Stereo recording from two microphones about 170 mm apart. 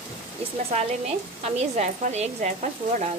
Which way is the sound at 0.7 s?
35° right (ahead or behind).